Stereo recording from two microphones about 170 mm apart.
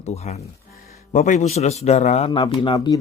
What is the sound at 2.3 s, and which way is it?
Speech, 25° left (ahead or behind).